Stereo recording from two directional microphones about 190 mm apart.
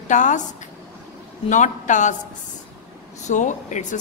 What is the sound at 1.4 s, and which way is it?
Speech, 40° left (ahead or behind).